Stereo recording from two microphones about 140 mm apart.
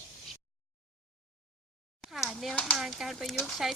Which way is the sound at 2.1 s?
Centre (ahead or behind).